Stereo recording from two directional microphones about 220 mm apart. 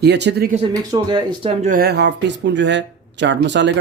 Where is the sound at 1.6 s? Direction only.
40° right (ahead or behind).